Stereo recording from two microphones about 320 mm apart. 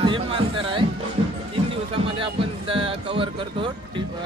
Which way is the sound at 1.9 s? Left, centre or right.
Centre.